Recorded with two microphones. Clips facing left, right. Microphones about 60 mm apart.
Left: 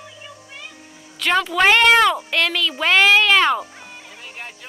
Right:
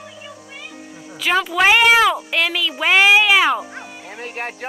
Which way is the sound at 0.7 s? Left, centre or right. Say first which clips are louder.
Right 7 dB; centre.